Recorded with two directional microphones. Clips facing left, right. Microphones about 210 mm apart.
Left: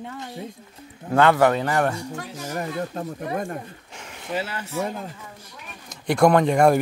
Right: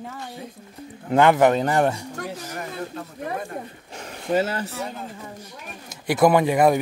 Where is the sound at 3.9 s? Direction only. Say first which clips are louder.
Right 7 dB; 35° right (ahead or behind).